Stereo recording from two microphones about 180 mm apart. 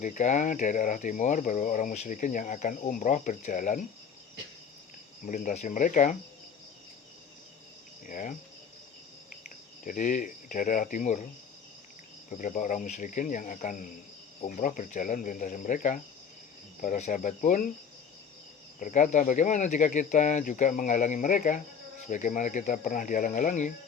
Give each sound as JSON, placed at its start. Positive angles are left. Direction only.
{"t": 0.0, "sound": "speech", "side_deg": 45}
{"t": 5.2, "sound": "speech", "side_deg": 45}
{"t": 8.0, "sound": "speech", "side_deg": 45}
{"t": 9.8, "sound": "speech", "side_deg": 45}
{"t": 12.3, "sound": "speech", "side_deg": 45}
{"t": 18.8, "sound": "speech", "side_deg": 45}